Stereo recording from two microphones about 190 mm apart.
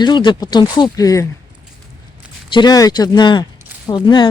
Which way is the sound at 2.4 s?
25° left (ahead or behind).